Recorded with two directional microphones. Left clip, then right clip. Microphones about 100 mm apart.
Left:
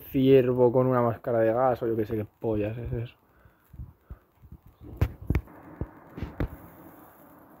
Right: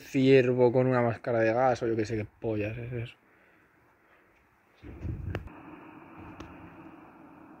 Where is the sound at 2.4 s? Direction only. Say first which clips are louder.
Left 4 dB; 50° left (ahead or behind).